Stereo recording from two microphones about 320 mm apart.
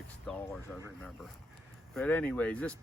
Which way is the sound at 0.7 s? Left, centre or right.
Centre.